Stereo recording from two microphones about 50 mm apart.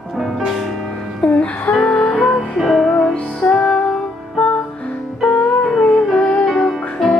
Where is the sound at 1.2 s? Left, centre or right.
Left.